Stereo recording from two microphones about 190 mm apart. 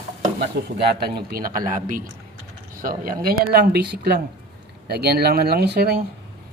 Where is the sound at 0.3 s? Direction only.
60° right (ahead or behind).